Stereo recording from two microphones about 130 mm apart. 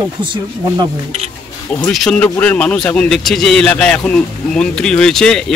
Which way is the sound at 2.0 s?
5° left (ahead or behind).